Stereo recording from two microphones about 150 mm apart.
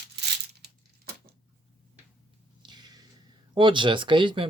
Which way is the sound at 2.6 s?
30° right (ahead or behind).